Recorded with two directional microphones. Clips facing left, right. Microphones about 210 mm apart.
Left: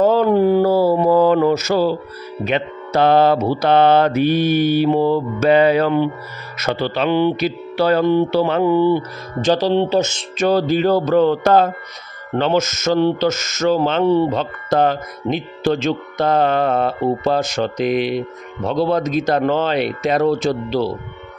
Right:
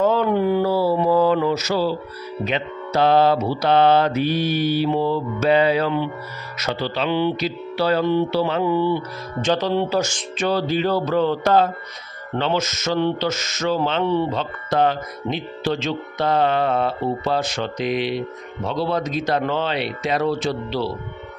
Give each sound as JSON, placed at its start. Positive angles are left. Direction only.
{"t": 0.0, "sound": "mantra", "side_deg": 40}
{"t": 2.4, "sound": "speech", "side_deg": 55}
{"t": 10.4, "sound": "speech", "side_deg": 45}